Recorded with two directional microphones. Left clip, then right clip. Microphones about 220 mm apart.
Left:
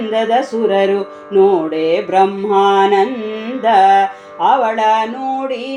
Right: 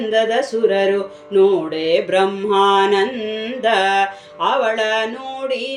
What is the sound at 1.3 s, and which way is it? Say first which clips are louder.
Music: left 3 dB; 20° left (ahead or behind).